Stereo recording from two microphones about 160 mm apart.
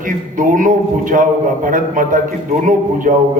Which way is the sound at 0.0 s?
55° right (ahead or behind).